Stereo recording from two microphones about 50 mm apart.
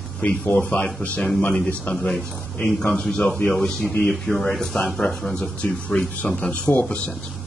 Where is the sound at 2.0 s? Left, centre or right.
Centre.